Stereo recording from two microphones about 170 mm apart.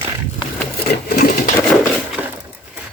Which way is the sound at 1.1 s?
60° left (ahead or behind).